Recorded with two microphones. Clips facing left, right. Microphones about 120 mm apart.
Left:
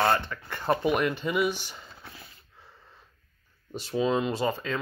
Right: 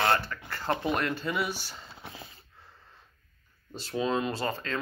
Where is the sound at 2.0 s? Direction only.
25° right (ahead or behind).